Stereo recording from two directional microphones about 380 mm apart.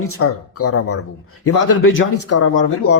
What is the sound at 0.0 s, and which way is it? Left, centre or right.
Speech, left.